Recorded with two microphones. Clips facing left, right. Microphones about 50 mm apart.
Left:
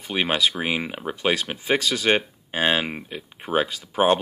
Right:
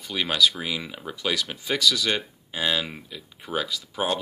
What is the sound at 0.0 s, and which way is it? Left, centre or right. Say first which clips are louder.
Speech: left 1 dB; left.